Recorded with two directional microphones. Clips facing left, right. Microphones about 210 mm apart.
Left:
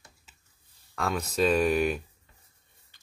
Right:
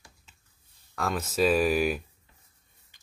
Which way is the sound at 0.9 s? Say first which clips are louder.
Even; centre (ahead or behind).